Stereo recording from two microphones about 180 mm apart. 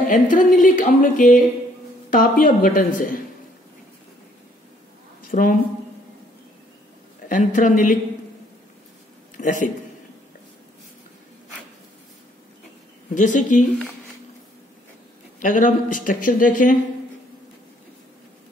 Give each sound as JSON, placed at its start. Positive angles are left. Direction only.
{"t": 0.1, "sound": "speech", "side_deg": 45}
{"t": 5.3, "sound": "speech", "side_deg": 50}
{"t": 7.2, "sound": "speech", "side_deg": 45}
{"t": 9.4, "sound": "a man's voice", "side_deg": 45}
{"t": 13.1, "sound": "speech", "side_deg": 45}
{"t": 15.3, "sound": "speech", "side_deg": 45}